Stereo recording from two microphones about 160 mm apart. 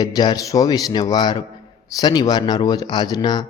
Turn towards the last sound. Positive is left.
turn(degrees=25)  # may be behind; listen again after turning